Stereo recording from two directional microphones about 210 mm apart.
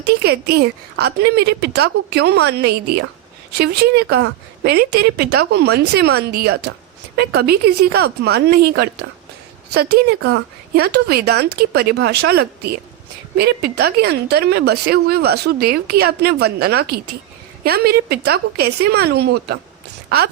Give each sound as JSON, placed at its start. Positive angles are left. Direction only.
{"t": 0.1, "sound": "a woman's voice", "side_deg": -50}